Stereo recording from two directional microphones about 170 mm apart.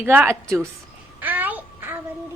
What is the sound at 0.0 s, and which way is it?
Speech, 10° right (ahead or behind).